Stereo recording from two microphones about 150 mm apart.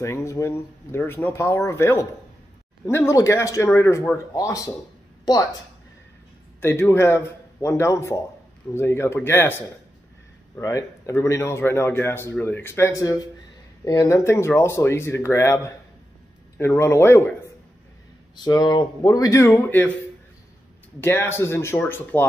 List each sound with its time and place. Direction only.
0.0 s speech: 20° left (ahead or behind)
6.6 s speech: 15° left (ahead or behind)
18.3 s speech: 25° left (ahead or behind)
21.0 s speech: 15° left (ahead or behind)